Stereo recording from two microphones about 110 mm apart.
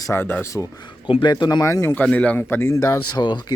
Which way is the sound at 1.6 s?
25° left (ahead or behind).